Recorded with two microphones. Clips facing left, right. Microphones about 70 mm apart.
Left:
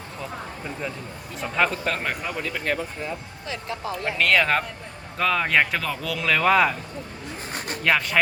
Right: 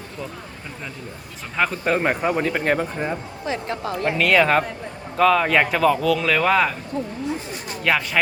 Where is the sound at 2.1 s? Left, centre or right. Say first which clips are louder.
Right 8 dB; right.